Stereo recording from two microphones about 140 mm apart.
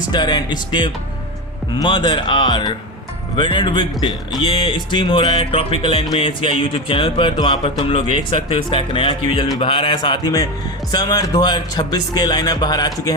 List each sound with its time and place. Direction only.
0.1 s speech: 30° left (ahead or behind)